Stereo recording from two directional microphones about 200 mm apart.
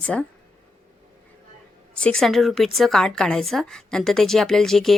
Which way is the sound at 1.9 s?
5° left (ahead or behind).